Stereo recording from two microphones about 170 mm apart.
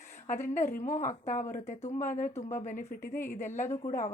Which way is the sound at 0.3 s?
45° left (ahead or behind).